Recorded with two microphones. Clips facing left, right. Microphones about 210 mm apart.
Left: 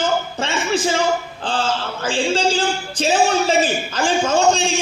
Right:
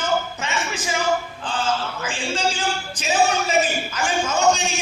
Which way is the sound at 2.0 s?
30° left (ahead or behind).